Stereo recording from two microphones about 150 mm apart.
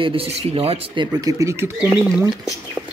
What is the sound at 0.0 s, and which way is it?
Speech, 40° right (ahead or behind).